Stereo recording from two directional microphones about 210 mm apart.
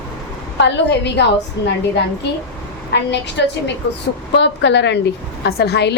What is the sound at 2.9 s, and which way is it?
A woman's voice, 55° left (ahead or behind).